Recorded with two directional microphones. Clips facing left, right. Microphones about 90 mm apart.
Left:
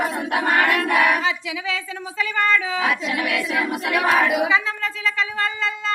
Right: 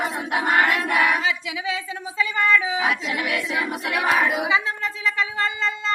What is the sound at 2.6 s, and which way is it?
Speech, 20° right (ahead or behind).